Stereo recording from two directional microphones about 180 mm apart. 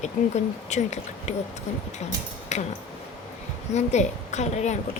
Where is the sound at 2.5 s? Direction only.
40° left (ahead or behind).